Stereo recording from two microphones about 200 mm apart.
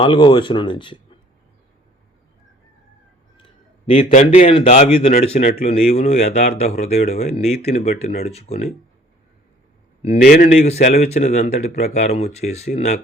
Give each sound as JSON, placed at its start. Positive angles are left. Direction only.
{"t": 0.0, "sound": "speech", "side_deg": 25}
{"t": 3.8, "sound": "speech", "side_deg": 30}
{"t": 10.2, "sound": "speech", "side_deg": 40}